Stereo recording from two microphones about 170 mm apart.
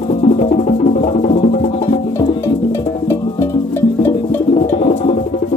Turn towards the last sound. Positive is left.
turn(degrees=40)  # may be behind; listen again after turning